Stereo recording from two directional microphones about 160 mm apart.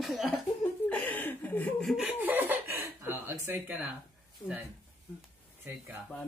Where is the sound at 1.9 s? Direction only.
5° right (ahead or behind).